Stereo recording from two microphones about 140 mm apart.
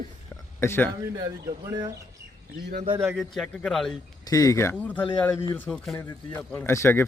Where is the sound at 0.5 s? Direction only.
15° left (ahead or behind).